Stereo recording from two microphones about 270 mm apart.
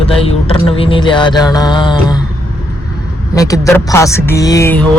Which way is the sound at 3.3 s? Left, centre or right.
Centre.